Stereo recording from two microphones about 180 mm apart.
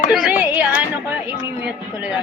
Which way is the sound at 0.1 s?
5° right (ahead or behind).